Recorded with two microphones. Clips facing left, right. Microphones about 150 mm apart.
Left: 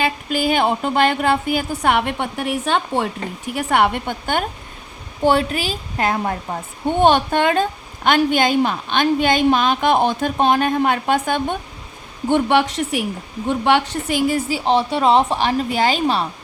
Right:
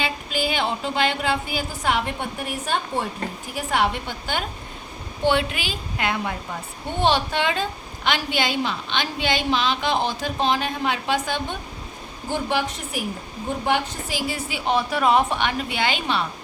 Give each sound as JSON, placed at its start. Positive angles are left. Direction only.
{"t": 0.0, "sound": "a woman's voice", "side_deg": 50}
{"t": 5.2, "sound": "a woman's voice", "side_deg": 40}
{"t": 12.3, "sound": "a woman's voice", "side_deg": 65}
{"t": 14.6, "sound": "a woman's voice", "side_deg": 30}